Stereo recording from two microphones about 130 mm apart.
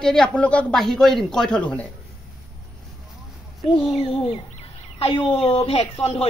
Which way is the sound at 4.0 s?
45° left (ahead or behind).